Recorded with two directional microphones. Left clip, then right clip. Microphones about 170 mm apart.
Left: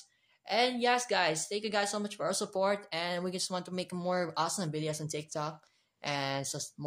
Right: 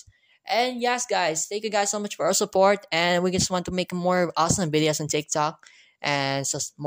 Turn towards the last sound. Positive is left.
turn(degrees=-50)  # may be behind; listen again after turning